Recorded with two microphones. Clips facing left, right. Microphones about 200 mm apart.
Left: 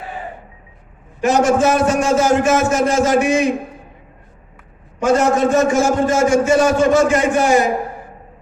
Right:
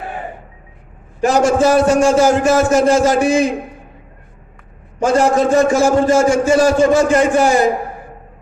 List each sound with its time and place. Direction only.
1.2 s a man's voice: 30° right (ahead or behind)
5.0 s a man's voice: 30° right (ahead or behind)